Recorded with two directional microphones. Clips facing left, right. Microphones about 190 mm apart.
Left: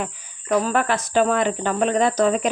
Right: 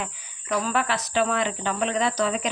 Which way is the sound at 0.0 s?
45° left (ahead or behind).